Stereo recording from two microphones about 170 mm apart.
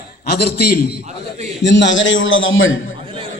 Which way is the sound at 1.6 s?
90° left.